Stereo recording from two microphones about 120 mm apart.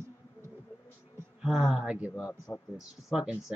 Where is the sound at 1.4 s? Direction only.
Centre (ahead or behind).